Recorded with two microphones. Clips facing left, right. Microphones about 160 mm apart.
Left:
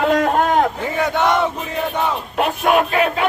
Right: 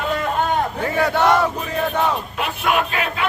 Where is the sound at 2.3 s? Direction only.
45° left (ahead or behind).